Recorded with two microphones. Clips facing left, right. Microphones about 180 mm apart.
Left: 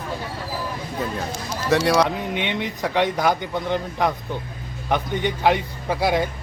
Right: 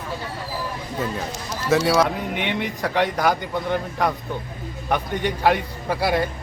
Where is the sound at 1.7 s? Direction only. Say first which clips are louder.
Even; centre (ahead or behind).